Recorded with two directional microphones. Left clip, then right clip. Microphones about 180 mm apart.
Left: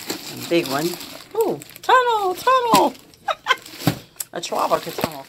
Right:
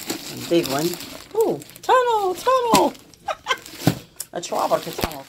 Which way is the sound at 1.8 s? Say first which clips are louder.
Left 2 dB; 30° right (ahead or behind).